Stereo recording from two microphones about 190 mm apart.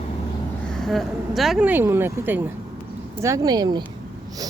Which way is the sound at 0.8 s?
Centre (ahead or behind).